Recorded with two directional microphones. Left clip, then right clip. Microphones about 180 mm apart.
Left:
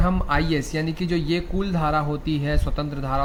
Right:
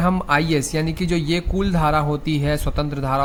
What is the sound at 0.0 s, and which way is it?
A man's voice, 40° right (ahead or behind).